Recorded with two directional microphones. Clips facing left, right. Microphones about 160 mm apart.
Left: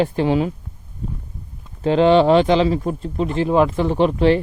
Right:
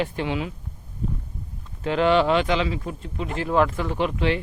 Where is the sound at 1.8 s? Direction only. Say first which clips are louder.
Left 6 dB; 30° left (ahead or behind).